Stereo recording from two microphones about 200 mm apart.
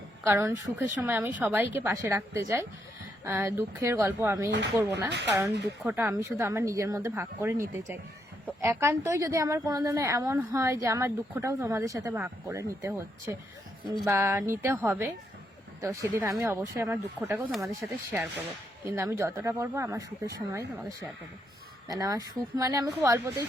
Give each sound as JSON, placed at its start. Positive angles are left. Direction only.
{"t": 0.3, "sound": "a woman's voice", "side_deg": -15}
{"t": 14.0, "sound": "a woman's voice", "side_deg": -15}